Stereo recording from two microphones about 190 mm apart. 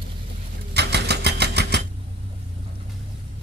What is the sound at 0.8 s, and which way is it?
Sewing machine, 60° right (ahead or behind).